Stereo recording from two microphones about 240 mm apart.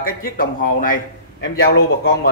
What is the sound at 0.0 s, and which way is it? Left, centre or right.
A man's voice, left.